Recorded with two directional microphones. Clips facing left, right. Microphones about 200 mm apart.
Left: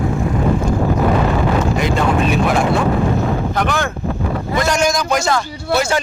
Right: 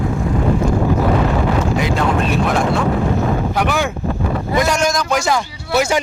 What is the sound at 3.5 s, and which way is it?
A man's voice, 10° right (ahead or behind).